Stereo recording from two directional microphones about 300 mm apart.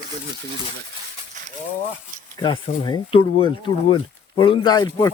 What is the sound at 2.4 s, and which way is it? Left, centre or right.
Speech, centre.